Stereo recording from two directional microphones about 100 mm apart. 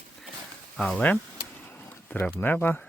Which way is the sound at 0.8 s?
10° left (ahead or behind).